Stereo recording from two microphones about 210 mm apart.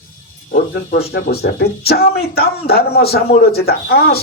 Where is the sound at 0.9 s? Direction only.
50° left (ahead or behind).